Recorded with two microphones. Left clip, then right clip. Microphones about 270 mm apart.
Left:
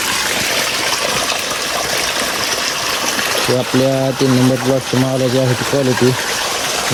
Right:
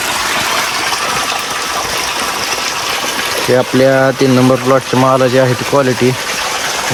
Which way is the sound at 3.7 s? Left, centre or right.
Centre.